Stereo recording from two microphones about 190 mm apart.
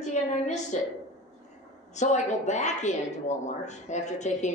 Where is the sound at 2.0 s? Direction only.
40° left (ahead or behind).